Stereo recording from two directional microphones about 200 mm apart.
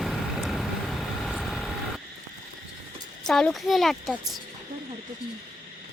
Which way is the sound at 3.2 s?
Centre (ahead or behind).